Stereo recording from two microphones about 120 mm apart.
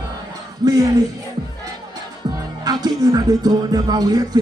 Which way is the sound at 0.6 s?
35° right (ahead or behind).